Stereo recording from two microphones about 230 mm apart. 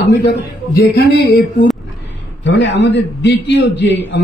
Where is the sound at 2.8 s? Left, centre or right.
Left.